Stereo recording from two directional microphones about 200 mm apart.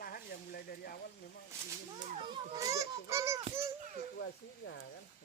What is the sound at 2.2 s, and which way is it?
A child's voice, 15° right (ahead or behind).